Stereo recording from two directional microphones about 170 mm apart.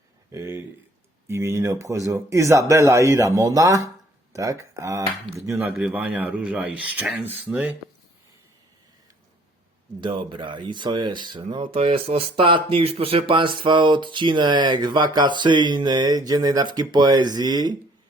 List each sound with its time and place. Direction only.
0.3 s speech: 15° right (ahead or behind)
10.0 s speech: 30° right (ahead or behind)